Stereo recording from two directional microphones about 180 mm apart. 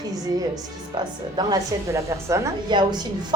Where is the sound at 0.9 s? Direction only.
25° right (ahead or behind).